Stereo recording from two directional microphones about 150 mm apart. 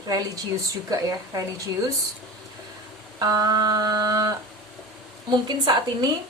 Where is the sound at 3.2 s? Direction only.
25° right (ahead or behind).